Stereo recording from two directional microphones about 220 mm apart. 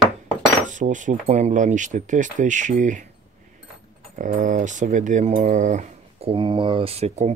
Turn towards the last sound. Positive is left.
turn(degrees=-30)  # may be behind; listen again after turning